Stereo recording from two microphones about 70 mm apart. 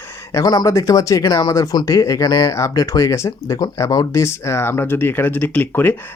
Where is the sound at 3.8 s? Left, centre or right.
Left.